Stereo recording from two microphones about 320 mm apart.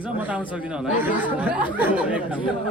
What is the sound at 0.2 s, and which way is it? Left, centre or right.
Speech, centre.